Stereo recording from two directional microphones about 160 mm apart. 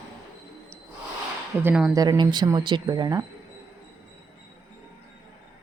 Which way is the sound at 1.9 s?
25° right (ahead or behind).